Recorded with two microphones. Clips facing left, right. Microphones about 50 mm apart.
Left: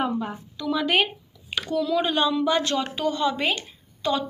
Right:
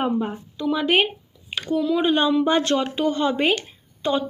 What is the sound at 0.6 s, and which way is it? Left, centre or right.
A woman's voice, right.